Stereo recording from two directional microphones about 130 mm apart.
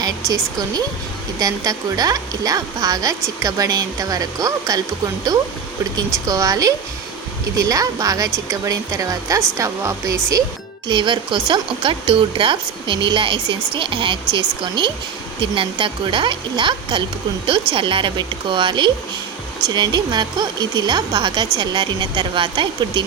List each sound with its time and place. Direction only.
0.3 s speech: 30° right (ahead or behind)
6.2 s speech: 25° right (ahead or behind)
10.8 s speech: 35° right (ahead or behind)